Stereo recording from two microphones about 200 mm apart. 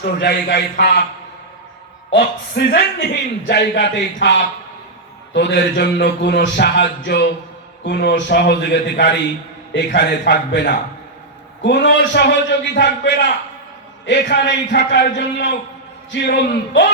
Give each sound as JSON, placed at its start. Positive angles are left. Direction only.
{"t": 0.0, "sound": "a man's voice", "side_deg": 60}
{"t": 2.0, "sound": "a man's voice", "side_deg": 55}